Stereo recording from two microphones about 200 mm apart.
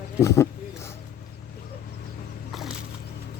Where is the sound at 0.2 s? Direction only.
15° left (ahead or behind).